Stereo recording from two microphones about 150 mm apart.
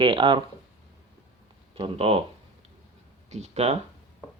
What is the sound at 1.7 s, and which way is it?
Speech, 40° right (ahead or behind).